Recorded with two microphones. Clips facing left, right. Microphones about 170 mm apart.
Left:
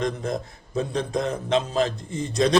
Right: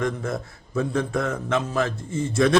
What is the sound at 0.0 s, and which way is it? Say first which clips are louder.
A man's voice: even; 20° left (ahead or behind).